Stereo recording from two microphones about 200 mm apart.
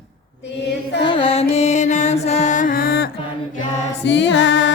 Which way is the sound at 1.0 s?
25° left (ahead or behind).